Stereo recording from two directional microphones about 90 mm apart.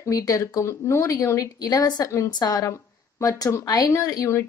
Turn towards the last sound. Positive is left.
turn(degrees=35)  # may be behind; listen again after turning